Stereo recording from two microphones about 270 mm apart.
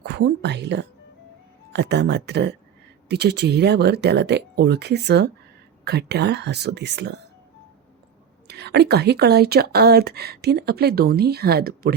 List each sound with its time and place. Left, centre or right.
0.0 s a woman's voice: right
8.4 s speech: right